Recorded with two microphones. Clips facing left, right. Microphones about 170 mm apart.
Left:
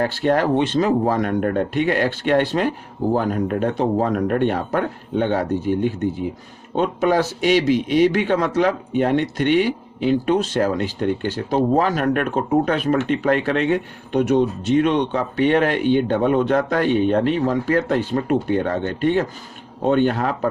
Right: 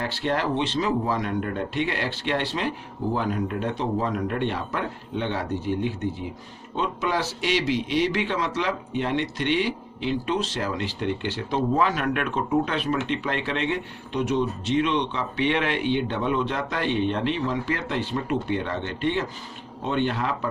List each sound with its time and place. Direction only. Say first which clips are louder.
0.0 s a man's voice: left 7 dB; 50° left (ahead or behind)